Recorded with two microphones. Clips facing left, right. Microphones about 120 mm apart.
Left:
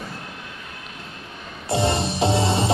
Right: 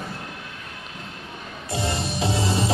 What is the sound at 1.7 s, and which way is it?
Music, 30° left (ahead or behind).